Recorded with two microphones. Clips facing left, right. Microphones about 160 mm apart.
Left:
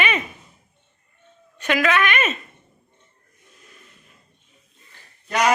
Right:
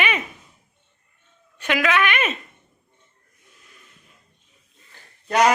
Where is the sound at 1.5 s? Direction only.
10° right (ahead or behind).